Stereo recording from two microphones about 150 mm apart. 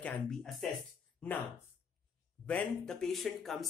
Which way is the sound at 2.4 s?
5° left (ahead or behind).